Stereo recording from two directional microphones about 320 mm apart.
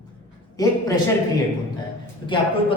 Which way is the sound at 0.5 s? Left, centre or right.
Centre.